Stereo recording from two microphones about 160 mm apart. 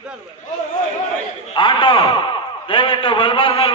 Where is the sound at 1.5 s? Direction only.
30° left (ahead or behind).